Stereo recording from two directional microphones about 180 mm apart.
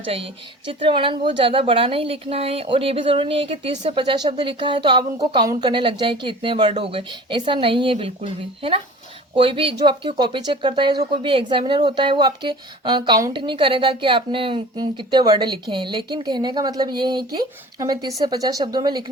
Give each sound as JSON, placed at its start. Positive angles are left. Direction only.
{"t": 0.0, "sound": "a woman's voice", "side_deg": -30}